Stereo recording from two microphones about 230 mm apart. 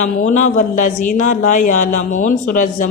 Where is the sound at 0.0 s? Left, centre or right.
Left.